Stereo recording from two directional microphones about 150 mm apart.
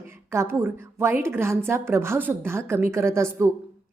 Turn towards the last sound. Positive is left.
turn(degrees=-20)  # may be behind; listen again after turning